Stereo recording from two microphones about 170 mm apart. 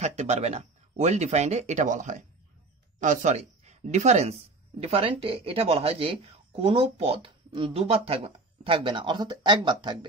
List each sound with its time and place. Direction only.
0.0 s speech: 40° right (ahead or behind)